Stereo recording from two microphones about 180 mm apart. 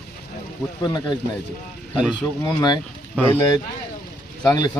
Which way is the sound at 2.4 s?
25° left (ahead or behind).